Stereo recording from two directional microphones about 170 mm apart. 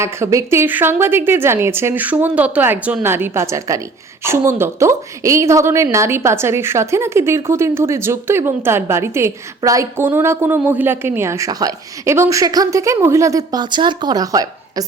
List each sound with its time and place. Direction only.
0.0 s a woman's voice: 15° right (ahead or behind)